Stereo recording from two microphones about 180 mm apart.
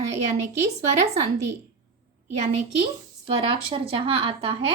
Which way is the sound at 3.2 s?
30° right (ahead or behind).